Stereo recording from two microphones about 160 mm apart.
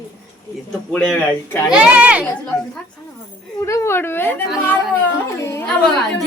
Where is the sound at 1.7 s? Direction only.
5° right (ahead or behind).